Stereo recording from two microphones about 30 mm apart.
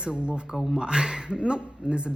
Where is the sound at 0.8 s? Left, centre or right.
Right.